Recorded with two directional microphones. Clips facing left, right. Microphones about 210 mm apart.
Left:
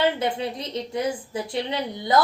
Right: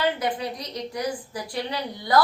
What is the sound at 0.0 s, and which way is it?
A woman's voice, 25° left (ahead or behind).